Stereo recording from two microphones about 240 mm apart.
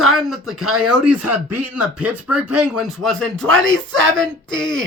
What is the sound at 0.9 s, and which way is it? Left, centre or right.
Speech, right.